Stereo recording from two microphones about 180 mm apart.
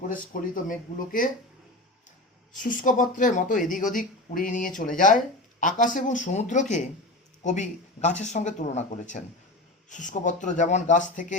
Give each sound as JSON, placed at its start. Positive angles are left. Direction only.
{"t": 0.1, "sound": "speech", "side_deg": 50}
{"t": 2.6, "sound": "speech", "side_deg": 45}